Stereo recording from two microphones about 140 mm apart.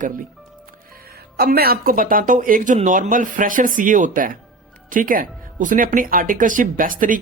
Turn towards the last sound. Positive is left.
turn(degrees=-75)  # may be behind; listen again after turning